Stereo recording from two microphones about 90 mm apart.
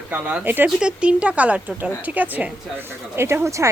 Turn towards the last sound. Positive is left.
turn(degrees=-35)  # may be behind; listen again after turning